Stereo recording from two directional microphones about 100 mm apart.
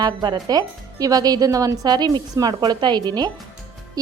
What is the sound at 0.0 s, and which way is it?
A woman's voice, 45° right (ahead or behind).